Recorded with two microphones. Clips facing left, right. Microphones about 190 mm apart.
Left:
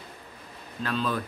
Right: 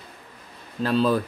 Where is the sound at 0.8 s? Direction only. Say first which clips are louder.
Right 8 dB; 35° right (ahead or behind).